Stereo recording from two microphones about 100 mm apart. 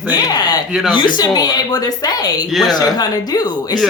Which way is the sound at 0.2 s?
40° left (ahead or behind).